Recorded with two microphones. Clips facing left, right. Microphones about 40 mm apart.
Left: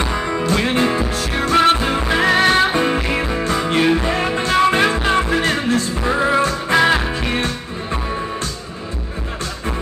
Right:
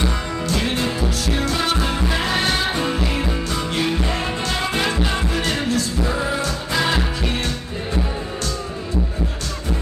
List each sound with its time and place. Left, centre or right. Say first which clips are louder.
0.3 s music: left 5 dB; left
0.6 s music: left 4 dB; left